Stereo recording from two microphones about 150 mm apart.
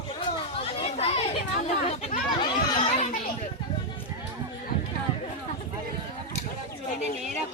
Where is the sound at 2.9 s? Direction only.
45° left (ahead or behind).